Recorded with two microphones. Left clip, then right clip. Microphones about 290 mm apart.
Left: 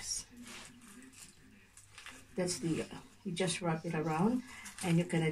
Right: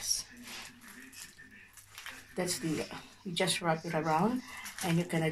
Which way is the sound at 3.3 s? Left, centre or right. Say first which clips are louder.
Right 5 dB; centre.